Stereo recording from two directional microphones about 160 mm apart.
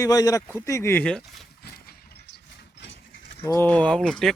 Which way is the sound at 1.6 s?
70° left (ahead or behind).